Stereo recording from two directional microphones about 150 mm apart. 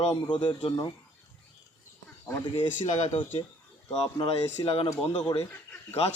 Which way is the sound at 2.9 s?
50° left (ahead or behind).